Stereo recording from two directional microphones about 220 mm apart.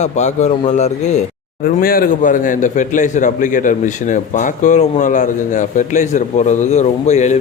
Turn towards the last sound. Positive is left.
turn(degrees=30)  # may be behind; listen again after turning